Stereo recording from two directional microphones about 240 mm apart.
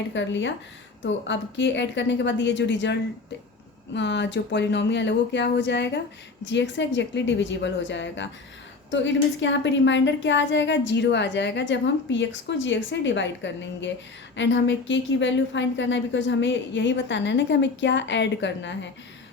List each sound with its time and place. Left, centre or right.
0.1 s a woman's voice: left